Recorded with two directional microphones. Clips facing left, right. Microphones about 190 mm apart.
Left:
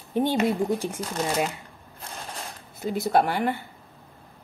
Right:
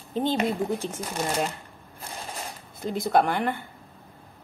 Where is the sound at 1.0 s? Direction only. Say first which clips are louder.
Left 1 dB; 10° right (ahead or behind).